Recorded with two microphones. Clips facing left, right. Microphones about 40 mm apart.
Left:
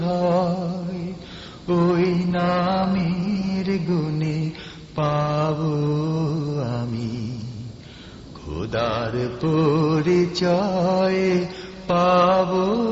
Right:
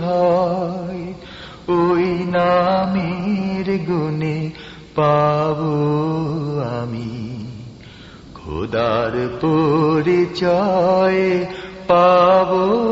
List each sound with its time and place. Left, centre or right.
0.0 s music: centre
0.5 s a sound: right
1.6 s mantra: right
2.1 s music: right
3.1 s music: right
4.9 s mantra: right
5.4 s mantra: centre
6.1 s mantra: right
8.4 s a sound: right
8.7 s mantra: centre
9.6 s music: centre
10.7 s mantra: right
11.5 s mantra: right
12.1 s mantra: centre